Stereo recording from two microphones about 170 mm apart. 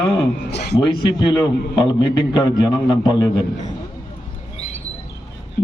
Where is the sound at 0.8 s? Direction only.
30° left (ahead or behind).